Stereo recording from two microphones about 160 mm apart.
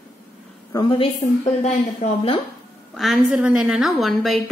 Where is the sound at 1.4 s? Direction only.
45° left (ahead or behind).